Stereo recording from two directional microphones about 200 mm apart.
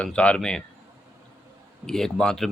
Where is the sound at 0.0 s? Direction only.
5° left (ahead or behind).